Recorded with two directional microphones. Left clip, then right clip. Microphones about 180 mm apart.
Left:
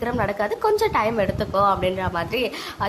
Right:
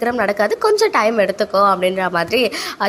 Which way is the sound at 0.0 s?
20° right (ahead or behind).